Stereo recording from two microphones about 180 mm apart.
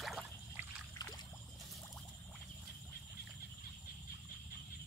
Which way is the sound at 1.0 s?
20° left (ahead or behind).